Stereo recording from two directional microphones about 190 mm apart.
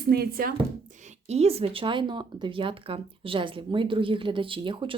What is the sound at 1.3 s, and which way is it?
Speech, 35° right (ahead or behind).